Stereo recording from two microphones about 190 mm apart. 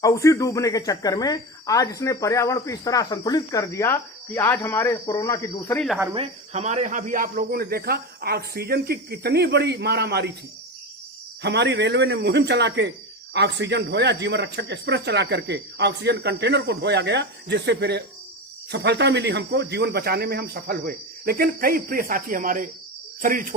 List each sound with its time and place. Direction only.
0.0 s a woman's voice: 15° left (ahead or behind)
6.1 s speech: 35° right (ahead or behind); by 10.3 s 60° right (ahead or behind)
11.4 s speech: 60° right (ahead or behind); by 23.6 s 45° right (ahead or behind)